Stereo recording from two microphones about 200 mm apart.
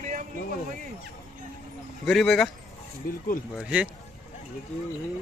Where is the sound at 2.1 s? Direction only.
Centre (ahead or behind).